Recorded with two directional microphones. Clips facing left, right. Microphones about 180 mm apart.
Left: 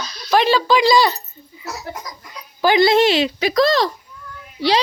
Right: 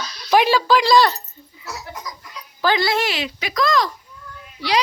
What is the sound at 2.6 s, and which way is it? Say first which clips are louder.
Speech: left 6 dB; 15° left (ahead or behind).